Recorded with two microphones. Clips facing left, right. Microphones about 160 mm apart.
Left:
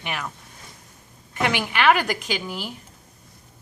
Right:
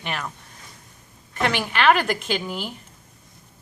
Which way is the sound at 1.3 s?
15° left (ahead or behind).